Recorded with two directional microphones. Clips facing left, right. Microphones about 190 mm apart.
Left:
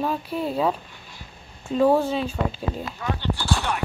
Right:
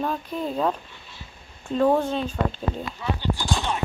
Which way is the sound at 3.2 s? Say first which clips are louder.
Left 2 dB; 15° right (ahead or behind).